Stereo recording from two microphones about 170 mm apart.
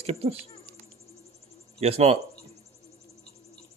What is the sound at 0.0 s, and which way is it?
Speech, 35° right (ahead or behind).